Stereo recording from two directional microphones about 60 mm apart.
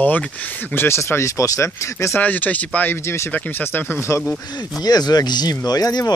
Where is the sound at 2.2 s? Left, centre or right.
Left.